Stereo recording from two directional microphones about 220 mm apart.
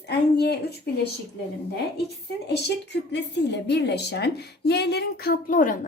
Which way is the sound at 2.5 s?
50° left (ahead or behind).